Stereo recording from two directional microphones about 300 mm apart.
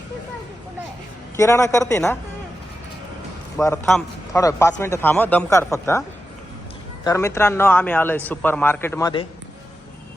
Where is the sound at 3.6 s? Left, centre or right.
Centre.